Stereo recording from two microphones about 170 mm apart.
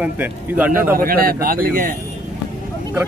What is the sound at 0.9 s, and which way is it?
Speech, 60° right (ahead or behind).